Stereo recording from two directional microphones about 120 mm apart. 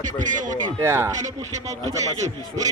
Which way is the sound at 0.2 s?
90° right.